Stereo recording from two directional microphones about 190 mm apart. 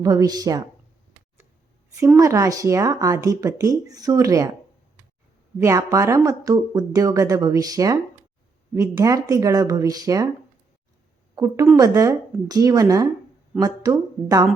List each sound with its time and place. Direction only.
0.0 s speech: 20° right (ahead or behind)
2.0 s speech: 15° right (ahead or behind)
5.5 s speech: 15° right (ahead or behind)
11.3 s speech: 15° right (ahead or behind)